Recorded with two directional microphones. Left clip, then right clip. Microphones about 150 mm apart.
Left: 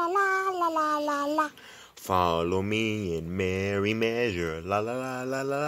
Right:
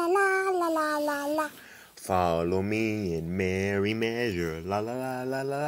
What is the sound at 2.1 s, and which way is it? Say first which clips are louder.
Speech: left 1 dB; 15° left (ahead or behind).